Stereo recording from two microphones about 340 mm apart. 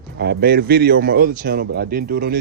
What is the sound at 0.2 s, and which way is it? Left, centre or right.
A man's voice, right.